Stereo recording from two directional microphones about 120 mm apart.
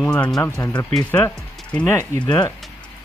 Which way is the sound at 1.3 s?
10° left (ahead or behind).